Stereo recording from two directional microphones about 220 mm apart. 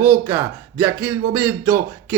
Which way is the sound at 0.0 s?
10° right (ahead or behind).